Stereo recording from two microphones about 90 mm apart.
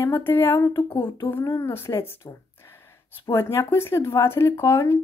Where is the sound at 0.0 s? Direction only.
25° left (ahead or behind).